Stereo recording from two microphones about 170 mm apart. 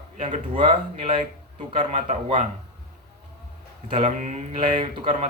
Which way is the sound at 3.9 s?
45° right (ahead or behind).